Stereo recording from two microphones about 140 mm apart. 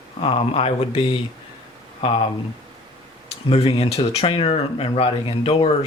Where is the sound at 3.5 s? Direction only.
45° left (ahead or behind).